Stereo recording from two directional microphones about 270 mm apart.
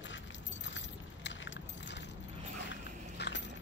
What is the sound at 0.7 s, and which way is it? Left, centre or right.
Keys jangling, left.